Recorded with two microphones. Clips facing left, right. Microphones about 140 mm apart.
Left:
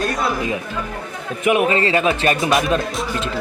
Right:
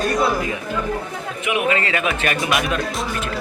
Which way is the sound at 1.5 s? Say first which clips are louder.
Left 5 dB; 35° left (ahead or behind).